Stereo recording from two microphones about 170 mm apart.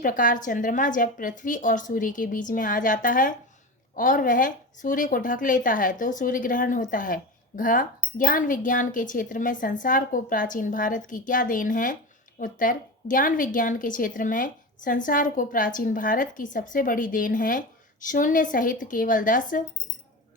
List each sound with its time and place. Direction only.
0.0 s a woman's voice: 50° left (ahead or behind)